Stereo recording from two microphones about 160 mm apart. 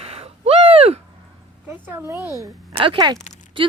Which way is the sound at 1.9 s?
15° right (ahead or behind).